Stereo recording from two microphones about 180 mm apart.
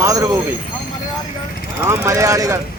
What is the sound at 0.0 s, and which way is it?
Speech, 20° right (ahead or behind).